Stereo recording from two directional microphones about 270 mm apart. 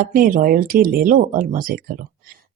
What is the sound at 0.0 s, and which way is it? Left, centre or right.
Speech, right.